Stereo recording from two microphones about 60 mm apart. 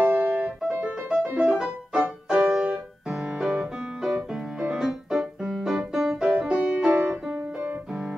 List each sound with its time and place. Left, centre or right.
0.0 s music: right
1.3 s music: centre
3.3 s piano: centre
4.6 s keyboard: centre
6.5 s music: right